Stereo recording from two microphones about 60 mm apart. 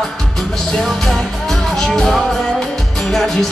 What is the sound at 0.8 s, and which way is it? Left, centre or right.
Music, centre.